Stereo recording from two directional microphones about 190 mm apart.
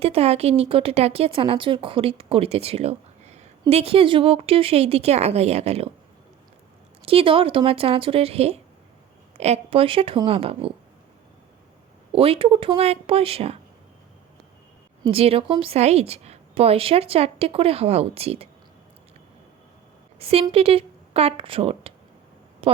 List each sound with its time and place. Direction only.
0.0 s speech: 30° right (ahead or behind)
7.0 s speech: 30° right (ahead or behind)
12.1 s speech: 30° right (ahead or behind)
15.0 s speech: 30° right (ahead or behind)
20.1 s a woman's voice: 30° right (ahead or behind)